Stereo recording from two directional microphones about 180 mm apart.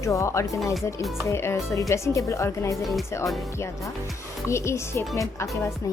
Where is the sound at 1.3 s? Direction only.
15° left (ahead or behind).